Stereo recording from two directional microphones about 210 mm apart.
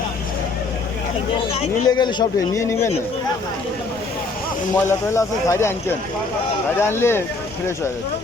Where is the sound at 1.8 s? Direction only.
20° left (ahead or behind).